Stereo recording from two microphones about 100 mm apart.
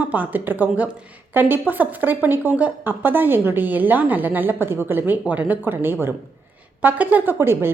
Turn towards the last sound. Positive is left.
turn(degrees=-25)  # may be behind; listen again after turning